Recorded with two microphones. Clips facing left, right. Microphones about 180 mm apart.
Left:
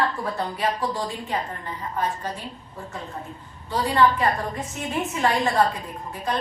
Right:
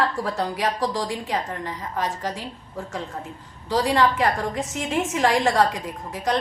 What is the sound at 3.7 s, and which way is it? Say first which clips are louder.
A woman's voice: even; 90° right.